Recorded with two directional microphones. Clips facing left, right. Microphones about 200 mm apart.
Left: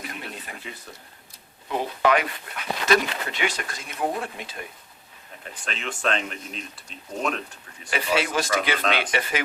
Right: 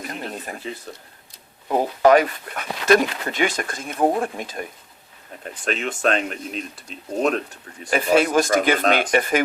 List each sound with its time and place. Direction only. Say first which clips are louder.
0.0 s a sound: right 6 dB; 45° right (ahead or behind)
1.6 s speech: right 6 dB; 40° right (ahead or behind)
5.6 s speech: right 6 dB; 45° right (ahead or behind)
7.9 s speech: right 7 dB; 45° right (ahead or behind)